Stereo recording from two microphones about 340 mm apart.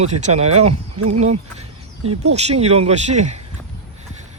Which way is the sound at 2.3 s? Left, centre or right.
Centre.